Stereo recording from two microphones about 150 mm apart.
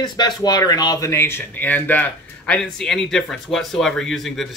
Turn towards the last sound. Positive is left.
turn(degrees=0)  # may be behind; listen again after turning